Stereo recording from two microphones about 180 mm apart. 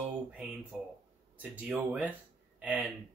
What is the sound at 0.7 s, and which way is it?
Speech, 5° right (ahead or behind).